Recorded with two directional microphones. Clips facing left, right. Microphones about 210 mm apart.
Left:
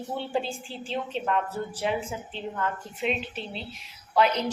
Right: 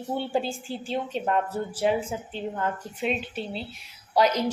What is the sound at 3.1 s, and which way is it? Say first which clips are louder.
A woman's voice: right 1 dB; 45° right (ahead or behind).